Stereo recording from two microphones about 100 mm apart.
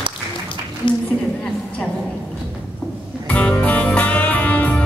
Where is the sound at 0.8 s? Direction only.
55° left (ahead or behind).